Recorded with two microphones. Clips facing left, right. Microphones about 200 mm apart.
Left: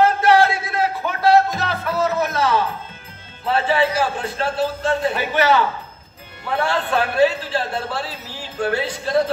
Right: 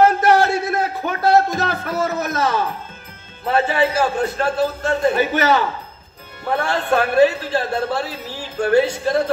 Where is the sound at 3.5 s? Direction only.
45° right (ahead or behind).